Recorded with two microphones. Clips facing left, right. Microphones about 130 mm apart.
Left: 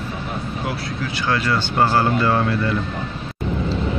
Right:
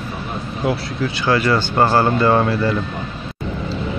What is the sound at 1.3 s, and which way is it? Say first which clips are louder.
Speech: right 5 dB; 5° right (ahead or behind).